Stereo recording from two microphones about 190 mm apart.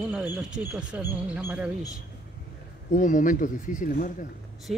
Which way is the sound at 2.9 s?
45° left (ahead or behind).